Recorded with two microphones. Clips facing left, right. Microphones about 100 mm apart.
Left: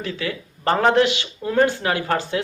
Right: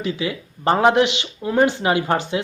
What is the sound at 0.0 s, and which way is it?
Speech, 15° right (ahead or behind).